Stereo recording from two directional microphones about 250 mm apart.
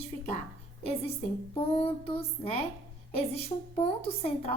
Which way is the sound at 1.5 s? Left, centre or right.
Left.